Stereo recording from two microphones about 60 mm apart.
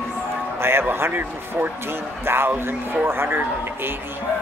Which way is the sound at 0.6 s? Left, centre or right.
Right.